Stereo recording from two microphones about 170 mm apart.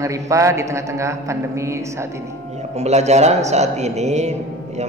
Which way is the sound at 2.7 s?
40° right (ahead or behind).